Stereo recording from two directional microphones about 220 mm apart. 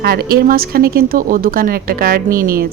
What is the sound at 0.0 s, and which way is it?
A woman's voice, 45° right (ahead or behind).